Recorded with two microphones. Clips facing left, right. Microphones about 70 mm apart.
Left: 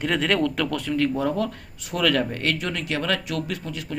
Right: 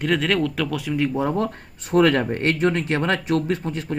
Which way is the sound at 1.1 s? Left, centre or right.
Right.